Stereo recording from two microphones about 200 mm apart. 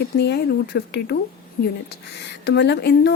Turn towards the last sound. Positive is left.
turn(degrees=60)  # may be behind; listen again after turning